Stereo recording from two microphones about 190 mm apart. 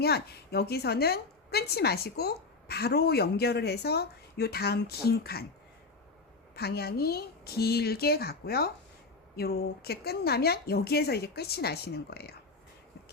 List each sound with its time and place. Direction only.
0.0 s a woman's voice: 55° left (ahead or behind)
6.6 s a woman's voice: 55° left (ahead or behind)